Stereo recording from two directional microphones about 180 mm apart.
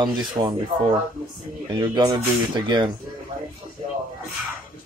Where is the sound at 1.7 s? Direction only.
25° right (ahead or behind).